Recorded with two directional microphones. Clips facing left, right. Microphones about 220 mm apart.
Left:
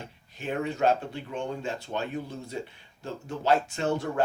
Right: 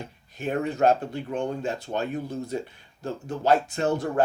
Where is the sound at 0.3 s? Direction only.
45° right (ahead or behind).